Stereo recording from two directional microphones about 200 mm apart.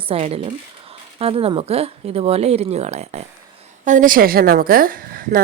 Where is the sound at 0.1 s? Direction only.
30° right (ahead or behind).